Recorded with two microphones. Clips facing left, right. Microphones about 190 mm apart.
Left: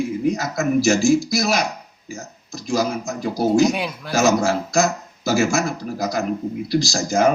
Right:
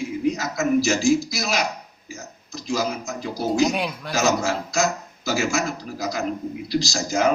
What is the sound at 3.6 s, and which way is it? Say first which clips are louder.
Speech: left 3 dB; centre (ahead or behind).